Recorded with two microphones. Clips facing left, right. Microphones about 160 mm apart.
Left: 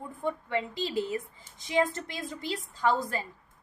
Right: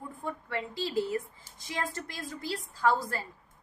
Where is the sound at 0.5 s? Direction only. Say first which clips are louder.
Right 2 dB; 20° left (ahead or behind).